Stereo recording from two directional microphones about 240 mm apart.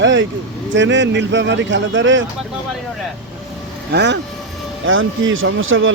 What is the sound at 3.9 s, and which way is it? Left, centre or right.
A man's voice, right.